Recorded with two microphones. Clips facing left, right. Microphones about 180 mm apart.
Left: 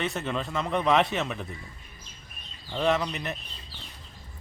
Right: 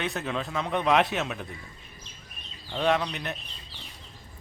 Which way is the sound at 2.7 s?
Centre (ahead or behind).